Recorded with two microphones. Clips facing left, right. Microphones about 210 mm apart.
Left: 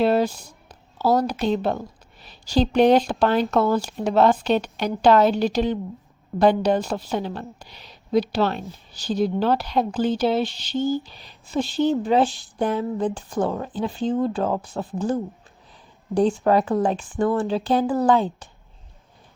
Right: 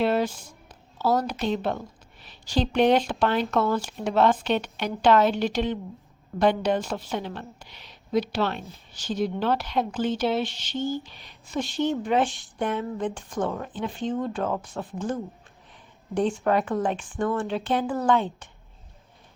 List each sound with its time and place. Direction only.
0.0 s music: 40° left (ahead or behind)
0.9 s a woman's voice: 35° left (ahead or behind)